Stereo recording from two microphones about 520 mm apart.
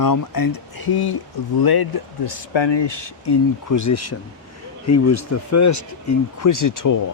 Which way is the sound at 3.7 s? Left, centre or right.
Left.